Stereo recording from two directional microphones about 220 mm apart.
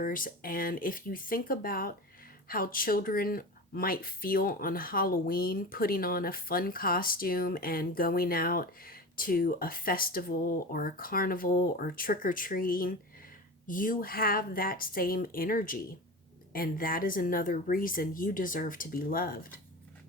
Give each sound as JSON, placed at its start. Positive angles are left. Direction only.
{"t": 0.0, "sound": "speech", "side_deg": 40}